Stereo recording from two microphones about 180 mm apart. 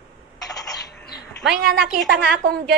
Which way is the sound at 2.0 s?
60° right (ahead or behind).